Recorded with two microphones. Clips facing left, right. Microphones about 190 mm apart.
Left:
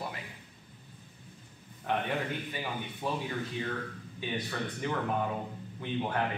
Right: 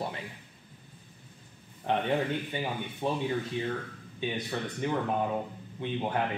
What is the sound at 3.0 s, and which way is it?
Speech, 25° right (ahead or behind).